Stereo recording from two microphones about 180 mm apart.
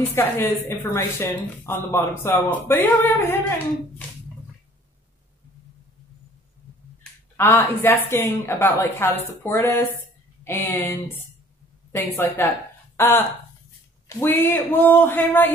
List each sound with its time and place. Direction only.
0.1 s speech: 15° left (ahead or behind)
7.3 s speech: 10° left (ahead or behind)